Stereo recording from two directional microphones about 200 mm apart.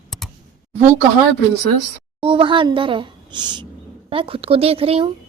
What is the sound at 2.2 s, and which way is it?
A woman's voice, 25° right (ahead or behind).